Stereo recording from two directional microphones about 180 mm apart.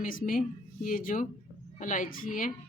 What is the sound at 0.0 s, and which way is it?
Speech, 50° left (ahead or behind).